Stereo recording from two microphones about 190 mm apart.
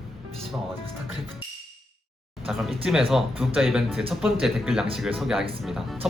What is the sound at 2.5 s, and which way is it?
Speech, centre (ahead or behind).